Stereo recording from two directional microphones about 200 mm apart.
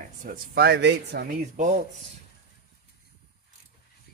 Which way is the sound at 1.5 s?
40° right (ahead or behind).